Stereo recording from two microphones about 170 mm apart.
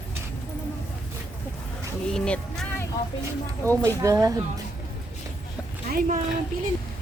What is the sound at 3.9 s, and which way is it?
Speech, 20° right (ahead or behind).